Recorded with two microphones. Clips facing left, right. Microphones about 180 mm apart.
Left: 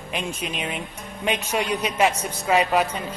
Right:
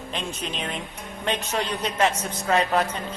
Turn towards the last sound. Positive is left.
turn(degrees=10)  # may be behind; listen again after turning